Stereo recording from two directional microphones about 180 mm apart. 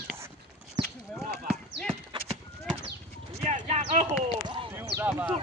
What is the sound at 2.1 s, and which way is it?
Clip-clop, 30° right (ahead or behind).